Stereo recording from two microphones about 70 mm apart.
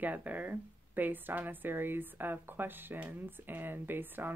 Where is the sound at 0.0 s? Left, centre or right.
Right.